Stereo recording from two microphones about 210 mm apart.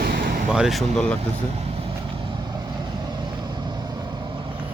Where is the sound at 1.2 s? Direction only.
30° right (ahead or behind).